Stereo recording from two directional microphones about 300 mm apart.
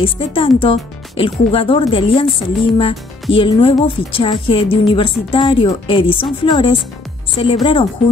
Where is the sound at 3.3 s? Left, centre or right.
Centre.